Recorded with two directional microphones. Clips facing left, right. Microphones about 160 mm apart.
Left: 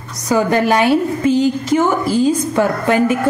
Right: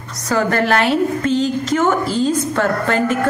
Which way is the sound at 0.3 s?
15° left (ahead or behind).